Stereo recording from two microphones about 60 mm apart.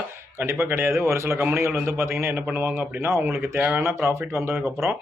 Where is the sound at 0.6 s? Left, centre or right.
Right.